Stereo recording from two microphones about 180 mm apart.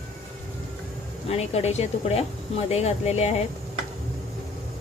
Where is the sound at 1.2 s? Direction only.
35° left (ahead or behind).